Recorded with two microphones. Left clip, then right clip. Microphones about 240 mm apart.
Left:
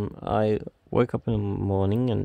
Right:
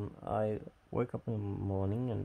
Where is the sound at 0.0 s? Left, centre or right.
Left.